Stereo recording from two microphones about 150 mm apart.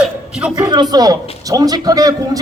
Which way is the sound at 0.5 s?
25° right (ahead or behind).